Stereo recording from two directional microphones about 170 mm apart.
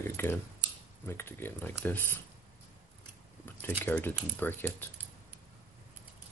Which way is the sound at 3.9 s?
10° left (ahead or behind).